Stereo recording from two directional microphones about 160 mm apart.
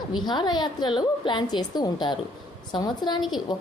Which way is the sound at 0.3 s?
25° left (ahead or behind).